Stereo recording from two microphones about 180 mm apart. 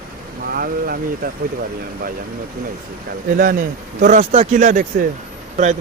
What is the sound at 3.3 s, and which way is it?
Speech, 50° right (ahead or behind).